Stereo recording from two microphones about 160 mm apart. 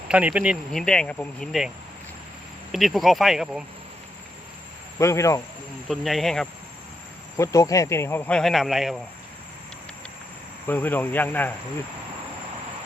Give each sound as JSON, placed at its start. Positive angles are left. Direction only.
{"t": 0.1, "sound": "speech", "side_deg": -10}
{"t": 2.7, "sound": "speech", "side_deg": 0}
{"t": 4.9, "sound": "speech", "side_deg": 20}
{"t": 5.9, "sound": "speech", "side_deg": 0}
{"t": 7.3, "sound": "speech", "side_deg": 20}
{"t": 10.7, "sound": "speech", "side_deg": 10}